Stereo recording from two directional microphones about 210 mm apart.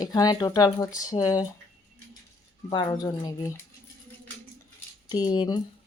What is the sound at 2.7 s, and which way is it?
Speech, 20° left (ahead or behind).